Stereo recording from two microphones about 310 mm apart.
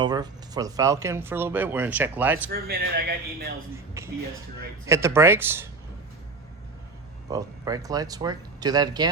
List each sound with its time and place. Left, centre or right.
0.0 s speech: centre
2.5 s speech: right
4.0 s speech: centre
7.3 s speech: centre